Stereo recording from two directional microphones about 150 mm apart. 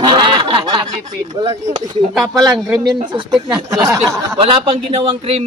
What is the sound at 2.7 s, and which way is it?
Speech, 25° right (ahead or behind).